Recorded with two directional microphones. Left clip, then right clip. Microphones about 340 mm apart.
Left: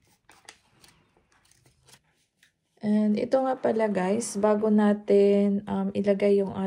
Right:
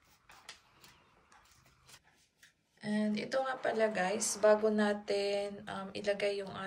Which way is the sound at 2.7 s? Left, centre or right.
Centre.